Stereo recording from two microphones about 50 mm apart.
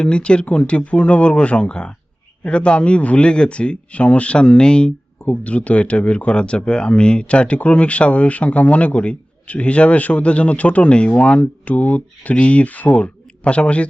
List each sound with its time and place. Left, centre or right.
0.0 s speech: left
5.2 s speech: left